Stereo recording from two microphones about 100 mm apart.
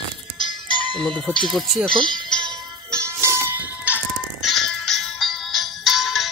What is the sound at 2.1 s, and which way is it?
Music, 5° left (ahead or behind).